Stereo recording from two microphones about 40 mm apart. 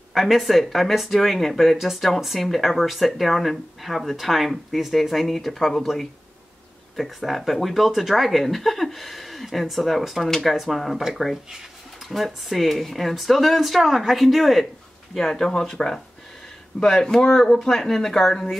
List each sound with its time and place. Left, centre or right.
0.1 s speech: centre
12.1 s speech: centre
15.1 s speech: centre
17.3 s speech: centre